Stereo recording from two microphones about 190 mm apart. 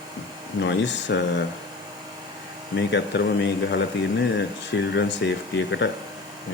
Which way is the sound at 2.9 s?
65° left (ahead or behind).